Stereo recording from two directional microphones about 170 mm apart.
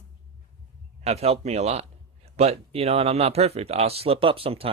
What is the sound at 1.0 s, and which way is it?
A man's voice, 40° right (ahead or behind).